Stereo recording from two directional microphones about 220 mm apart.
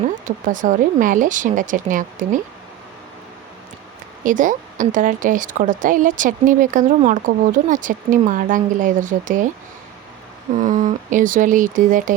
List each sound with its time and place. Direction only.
0.3 s speech: 35° right (ahead or behind)
4.2 s speech: 35° right (ahead or behind)
10.6 s speech: 35° right (ahead or behind)